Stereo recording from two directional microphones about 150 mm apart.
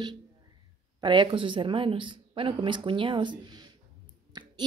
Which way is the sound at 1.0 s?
30° right (ahead or behind).